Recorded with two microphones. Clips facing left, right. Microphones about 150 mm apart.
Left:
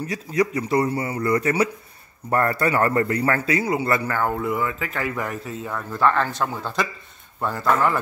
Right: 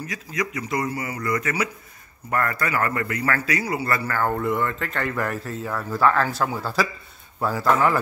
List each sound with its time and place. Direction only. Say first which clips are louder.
0.0 s a man's voice: left 7 dB; 30° left (ahead or behind)
4.3 s speech: right 1 dB; 5° left (ahead or behind)